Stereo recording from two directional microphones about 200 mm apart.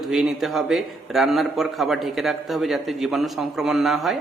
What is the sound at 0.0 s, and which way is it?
A man's voice, 5° right (ahead or behind).